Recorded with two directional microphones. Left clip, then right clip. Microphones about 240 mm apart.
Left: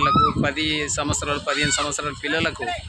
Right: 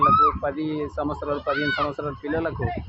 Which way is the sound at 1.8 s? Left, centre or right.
Left.